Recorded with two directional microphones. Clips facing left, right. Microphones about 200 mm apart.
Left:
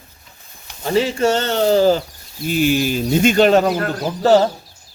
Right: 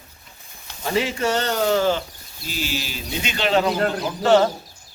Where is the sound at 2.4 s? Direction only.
55° left (ahead or behind).